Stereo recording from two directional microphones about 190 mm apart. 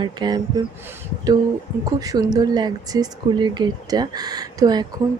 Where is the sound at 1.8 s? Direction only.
20° right (ahead or behind).